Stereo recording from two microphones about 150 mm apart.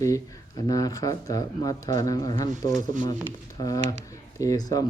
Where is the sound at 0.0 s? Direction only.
20° left (ahead or behind).